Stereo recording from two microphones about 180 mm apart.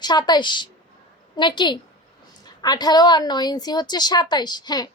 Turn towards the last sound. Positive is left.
turn(degrees=20)  # may be behind; listen again after turning